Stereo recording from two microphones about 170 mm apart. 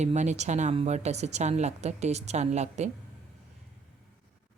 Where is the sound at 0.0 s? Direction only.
40° right (ahead or behind).